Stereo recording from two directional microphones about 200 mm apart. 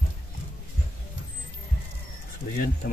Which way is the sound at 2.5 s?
45° left (ahead or behind).